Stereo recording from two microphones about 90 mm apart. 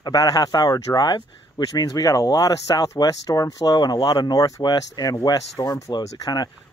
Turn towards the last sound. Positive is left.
turn(degrees=45)  # may be behind; listen again after turning